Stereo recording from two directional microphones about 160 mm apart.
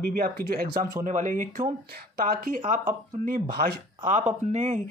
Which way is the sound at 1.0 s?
55° right (ahead or behind).